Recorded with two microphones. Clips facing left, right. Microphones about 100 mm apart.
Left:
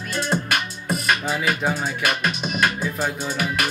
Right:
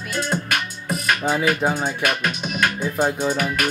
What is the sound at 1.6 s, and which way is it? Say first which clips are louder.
Music: right 2 dB; 30° right (ahead or behind).